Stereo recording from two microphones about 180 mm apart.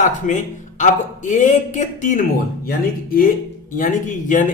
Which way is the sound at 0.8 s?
45° left (ahead or behind).